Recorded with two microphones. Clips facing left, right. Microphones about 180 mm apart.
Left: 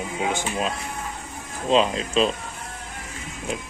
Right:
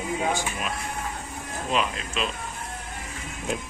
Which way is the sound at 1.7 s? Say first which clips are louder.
Left 8 dB; 30° left (ahead or behind).